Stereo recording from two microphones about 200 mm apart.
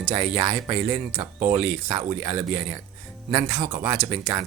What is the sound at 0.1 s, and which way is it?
Speech, 10° right (ahead or behind).